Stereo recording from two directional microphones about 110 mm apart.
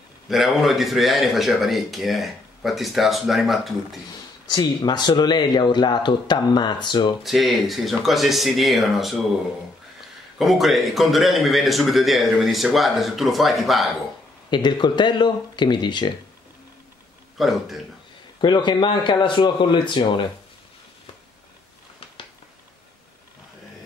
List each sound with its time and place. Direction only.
0.3 s speech: centre (ahead or behind)
4.5 s speech: 40° left (ahead or behind)
7.2 s speech: centre (ahead or behind)
10.4 s speech: centre (ahead or behind)
14.5 s speech: 45° left (ahead or behind)
17.4 s speech: centre (ahead or behind)
18.4 s speech: 45° left (ahead or behind)